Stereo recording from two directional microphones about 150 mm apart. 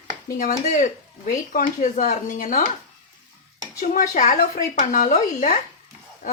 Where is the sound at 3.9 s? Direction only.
65° left (ahead or behind).